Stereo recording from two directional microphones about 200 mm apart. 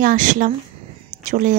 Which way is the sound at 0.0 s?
40° right (ahead or behind).